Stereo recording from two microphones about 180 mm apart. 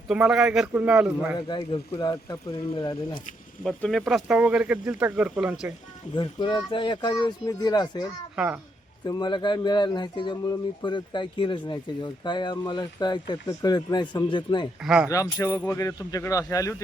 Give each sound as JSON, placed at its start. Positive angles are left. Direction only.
{"t": 0.1, "sound": "speech", "side_deg": -5}
{"t": 1.4, "sound": "speech", "side_deg": 25}
{"t": 3.6, "sound": "speech", "side_deg": 5}
{"t": 6.1, "sound": "speech", "side_deg": 25}
{"t": 8.4, "sound": "speech", "side_deg": -5}
{"t": 9.0, "sound": "speech", "side_deg": 25}
{"t": 14.8, "sound": "speech", "side_deg": -5}
{"t": 15.1, "sound": "speech", "side_deg": 20}